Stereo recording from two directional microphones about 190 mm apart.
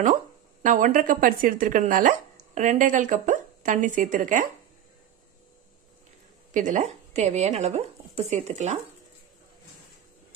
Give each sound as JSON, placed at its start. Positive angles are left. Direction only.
{"t": 0.0, "sound": "speech", "side_deg": -40}
{"t": 6.5, "sound": "speech", "side_deg": -40}